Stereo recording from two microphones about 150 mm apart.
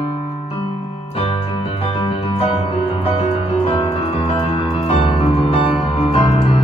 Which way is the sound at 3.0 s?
40° left (ahead or behind).